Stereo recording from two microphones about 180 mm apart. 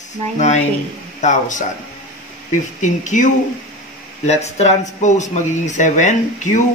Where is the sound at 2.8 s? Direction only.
45° left (ahead or behind).